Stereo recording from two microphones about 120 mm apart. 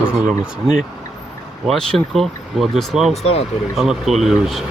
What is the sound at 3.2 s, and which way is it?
Speech, 60° left (ahead or behind).